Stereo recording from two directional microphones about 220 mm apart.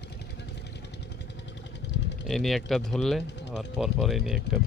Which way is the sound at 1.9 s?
55° left (ahead or behind).